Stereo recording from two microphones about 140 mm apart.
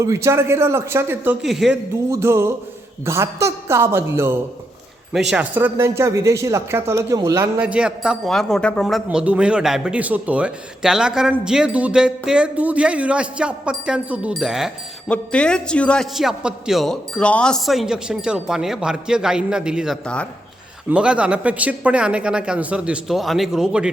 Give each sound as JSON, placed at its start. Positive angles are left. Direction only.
{"t": 0.0, "sound": "speech", "side_deg": -20}
{"t": 1.5, "sound": "a man's voice", "side_deg": -5}
{"t": 2.0, "sound": "speech", "side_deg": -20}
{"t": 7.6, "sound": "a man's voice", "side_deg": -10}
{"t": 9.0, "sound": "a man's voice", "side_deg": -10}